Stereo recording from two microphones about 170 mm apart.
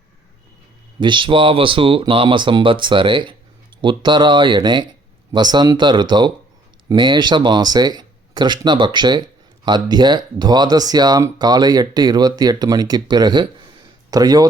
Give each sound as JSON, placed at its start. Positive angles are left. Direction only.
{"t": 0.9, "sound": "speech", "side_deg": -30}